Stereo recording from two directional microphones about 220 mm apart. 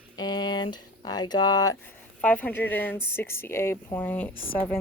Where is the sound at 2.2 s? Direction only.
5° left (ahead or behind).